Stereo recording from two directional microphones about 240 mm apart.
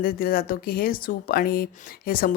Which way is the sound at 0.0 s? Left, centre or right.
Left.